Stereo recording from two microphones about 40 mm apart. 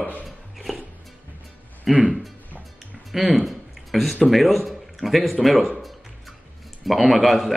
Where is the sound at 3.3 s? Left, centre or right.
Centre.